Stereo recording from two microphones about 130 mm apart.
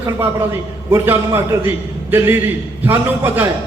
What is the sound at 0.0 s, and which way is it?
A man's voice, 20° right (ahead or behind).